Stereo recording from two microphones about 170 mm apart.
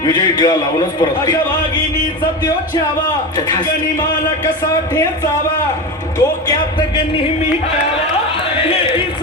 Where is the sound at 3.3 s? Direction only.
25° left (ahead or behind).